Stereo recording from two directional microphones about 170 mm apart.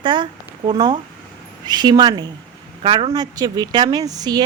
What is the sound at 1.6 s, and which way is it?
A woman's voice, 25° right (ahead or behind).